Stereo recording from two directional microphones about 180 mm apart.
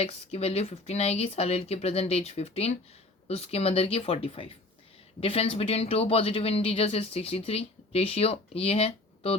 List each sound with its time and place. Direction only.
0.0 s speech: 35° left (ahead or behind)